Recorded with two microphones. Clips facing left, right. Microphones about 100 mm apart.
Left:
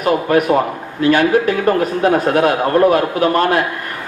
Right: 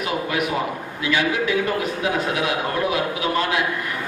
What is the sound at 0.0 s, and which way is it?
A man's voice, 45° left (ahead or behind).